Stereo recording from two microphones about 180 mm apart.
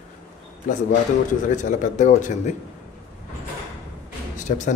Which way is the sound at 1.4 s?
45° left (ahead or behind).